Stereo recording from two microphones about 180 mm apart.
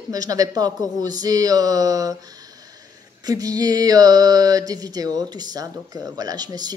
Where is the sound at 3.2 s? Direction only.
20° right (ahead or behind).